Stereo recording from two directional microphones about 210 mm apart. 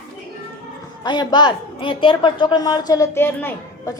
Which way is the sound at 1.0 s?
20° left (ahead or behind).